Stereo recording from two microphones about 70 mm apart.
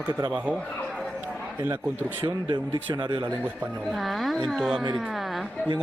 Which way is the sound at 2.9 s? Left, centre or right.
Right.